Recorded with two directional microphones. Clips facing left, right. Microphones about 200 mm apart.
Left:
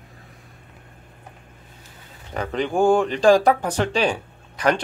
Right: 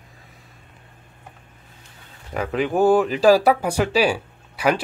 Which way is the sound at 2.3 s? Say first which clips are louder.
Right 1 dB; 5° right (ahead or behind).